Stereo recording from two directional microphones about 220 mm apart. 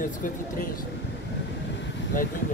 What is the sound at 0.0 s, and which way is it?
Speech, 35° left (ahead or behind).